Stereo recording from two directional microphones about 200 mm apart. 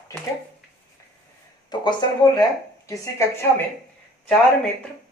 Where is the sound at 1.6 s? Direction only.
20° left (ahead or behind).